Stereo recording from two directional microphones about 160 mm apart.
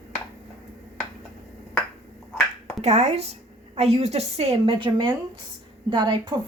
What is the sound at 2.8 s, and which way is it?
A woman's voice, 45° right (ahead or behind).